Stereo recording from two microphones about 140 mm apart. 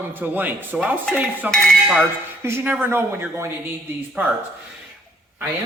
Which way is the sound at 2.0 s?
15° right (ahead or behind).